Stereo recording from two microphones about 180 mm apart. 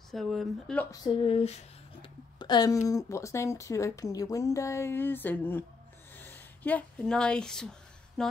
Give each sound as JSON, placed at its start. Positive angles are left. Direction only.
{"t": 0.1, "sound": "speech", "side_deg": 0}
{"t": 1.0, "sound": "speech", "side_deg": 30}
{"t": 8.2, "sound": "a sound", "side_deg": 5}